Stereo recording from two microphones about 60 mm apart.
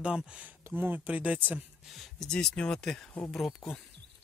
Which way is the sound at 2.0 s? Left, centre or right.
Centre.